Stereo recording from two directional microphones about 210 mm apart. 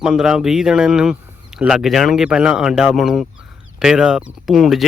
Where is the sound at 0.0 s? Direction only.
5° right (ahead or behind).